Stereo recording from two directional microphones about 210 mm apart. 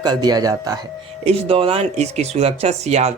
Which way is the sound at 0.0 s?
20° right (ahead or behind).